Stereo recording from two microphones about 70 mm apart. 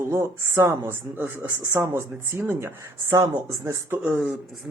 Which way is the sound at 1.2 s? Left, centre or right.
Right.